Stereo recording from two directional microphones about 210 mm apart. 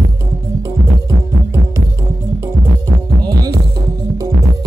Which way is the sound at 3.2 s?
20° right (ahead or behind).